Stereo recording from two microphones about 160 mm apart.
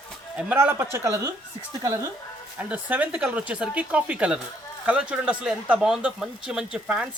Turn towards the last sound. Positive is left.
turn(degrees=-5)  # may be behind; listen again after turning